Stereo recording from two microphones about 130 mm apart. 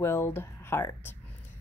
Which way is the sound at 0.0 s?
20° left (ahead or behind).